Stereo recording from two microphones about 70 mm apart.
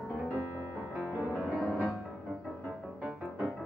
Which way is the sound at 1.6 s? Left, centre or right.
Centre.